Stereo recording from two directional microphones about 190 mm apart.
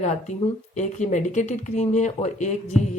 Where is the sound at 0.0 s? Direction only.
35° left (ahead or behind).